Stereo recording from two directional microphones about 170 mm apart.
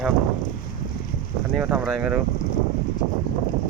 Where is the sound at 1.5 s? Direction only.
5° right (ahead or behind).